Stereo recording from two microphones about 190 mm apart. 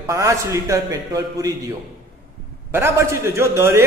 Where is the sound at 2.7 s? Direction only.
15° right (ahead or behind).